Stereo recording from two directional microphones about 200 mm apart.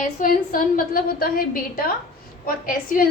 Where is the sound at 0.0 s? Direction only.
45° left (ahead or behind).